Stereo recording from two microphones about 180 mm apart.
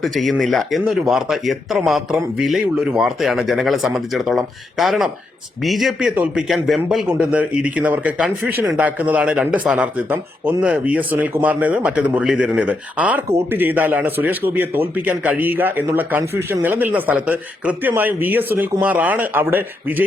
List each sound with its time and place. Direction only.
0.0 s a man's voice: centre (ahead or behind)